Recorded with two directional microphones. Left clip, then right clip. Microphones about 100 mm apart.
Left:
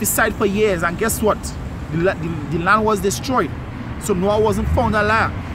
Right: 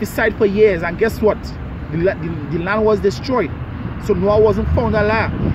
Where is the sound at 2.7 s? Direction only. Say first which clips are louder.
Even; 30° left (ahead or behind).